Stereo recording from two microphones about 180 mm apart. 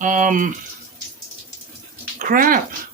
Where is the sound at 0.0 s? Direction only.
45° right (ahead or behind).